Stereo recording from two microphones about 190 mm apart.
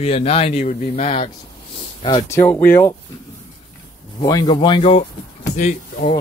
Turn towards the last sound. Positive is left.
turn(degrees=40)  # may be behind; listen again after turning